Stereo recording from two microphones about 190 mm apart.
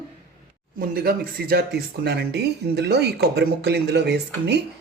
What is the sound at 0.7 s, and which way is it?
Speech, 50° right (ahead or behind).